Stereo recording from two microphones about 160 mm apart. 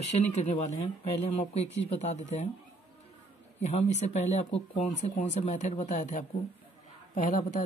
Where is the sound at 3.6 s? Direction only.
45° left (ahead or behind).